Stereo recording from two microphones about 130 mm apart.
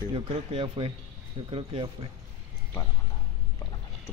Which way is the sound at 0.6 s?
40° right (ahead or behind).